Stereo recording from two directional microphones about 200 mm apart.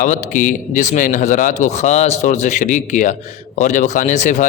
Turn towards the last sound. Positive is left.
turn(degrees=40)  # may be behind; listen again after turning